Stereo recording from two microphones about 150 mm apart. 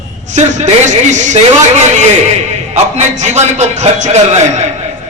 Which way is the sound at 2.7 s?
50° right (ahead or behind).